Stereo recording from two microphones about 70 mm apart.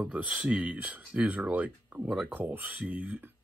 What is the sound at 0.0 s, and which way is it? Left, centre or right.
Speech, right.